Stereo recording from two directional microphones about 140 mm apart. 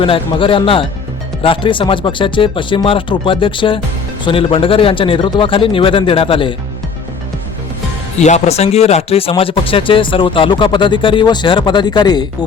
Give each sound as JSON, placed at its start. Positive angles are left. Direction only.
{"t": 0.0, "sound": "speech", "side_deg": 40}
{"t": 8.2, "sound": "speech", "side_deg": 55}